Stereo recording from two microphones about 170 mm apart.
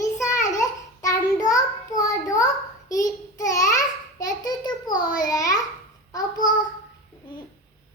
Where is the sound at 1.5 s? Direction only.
20° left (ahead or behind).